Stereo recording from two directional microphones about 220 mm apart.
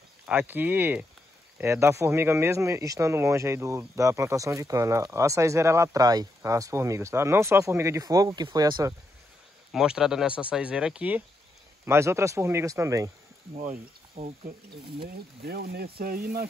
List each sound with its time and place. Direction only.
0.3 s speech: 10° right (ahead or behind)
9.7 s speech: 5° right (ahead or behind)
14.1 s speech: 25° right (ahead or behind)
15.0 s speech: 45° right (ahead or behind)